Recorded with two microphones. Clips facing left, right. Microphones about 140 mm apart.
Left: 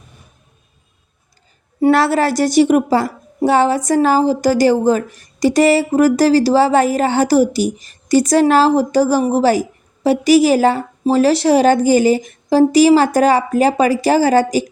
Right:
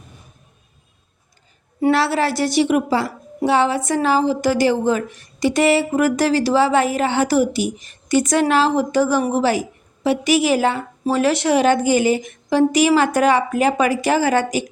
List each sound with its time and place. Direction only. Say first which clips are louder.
1.9 s a woman's voice: left 4 dB; 45° left (ahead or behind)